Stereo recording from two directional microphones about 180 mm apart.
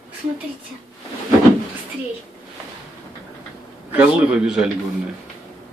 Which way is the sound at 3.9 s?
5° right (ahead or behind).